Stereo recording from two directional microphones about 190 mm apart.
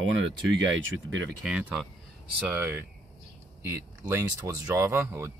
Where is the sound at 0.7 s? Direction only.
85° right.